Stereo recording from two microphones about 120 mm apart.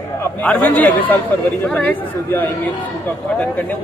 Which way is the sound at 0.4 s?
15° left (ahead or behind).